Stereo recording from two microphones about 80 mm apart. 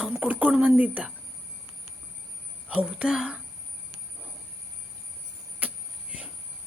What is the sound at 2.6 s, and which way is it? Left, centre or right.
Speech, centre.